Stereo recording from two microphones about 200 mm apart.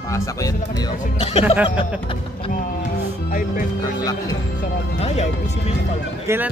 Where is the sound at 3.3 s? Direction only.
45° left (ahead or behind).